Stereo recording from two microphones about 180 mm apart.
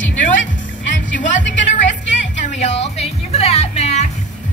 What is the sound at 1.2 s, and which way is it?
Speech, 45° left (ahead or behind).